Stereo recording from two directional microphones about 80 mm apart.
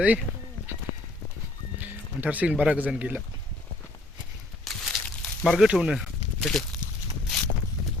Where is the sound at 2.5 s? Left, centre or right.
Centre.